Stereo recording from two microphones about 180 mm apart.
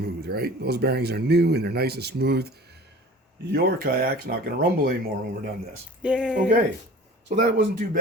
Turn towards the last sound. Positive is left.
turn(degrees=-50)  # may be behind; listen again after turning